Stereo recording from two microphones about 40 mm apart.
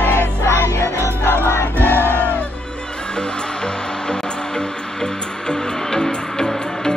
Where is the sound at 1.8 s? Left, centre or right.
Right.